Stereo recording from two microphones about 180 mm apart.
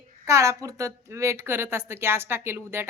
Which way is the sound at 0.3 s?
15° right (ahead or behind).